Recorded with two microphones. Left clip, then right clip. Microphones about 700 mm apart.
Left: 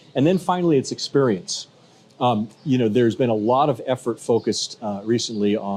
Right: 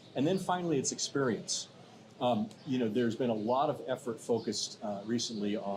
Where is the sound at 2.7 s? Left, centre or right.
Left.